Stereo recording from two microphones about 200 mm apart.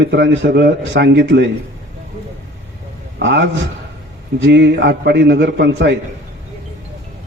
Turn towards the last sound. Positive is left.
turn(degrees=-60)  # may be behind; listen again after turning